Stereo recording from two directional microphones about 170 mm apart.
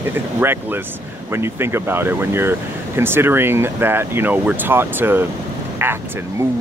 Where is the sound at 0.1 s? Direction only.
15° right (ahead or behind).